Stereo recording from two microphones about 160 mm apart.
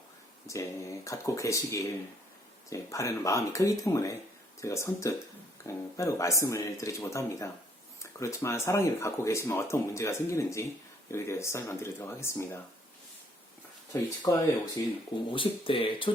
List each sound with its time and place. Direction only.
0.4 s speech: 20° left (ahead or behind)
13.9 s speech: 20° left (ahead or behind)
15.3 s speech: 35° left (ahead or behind)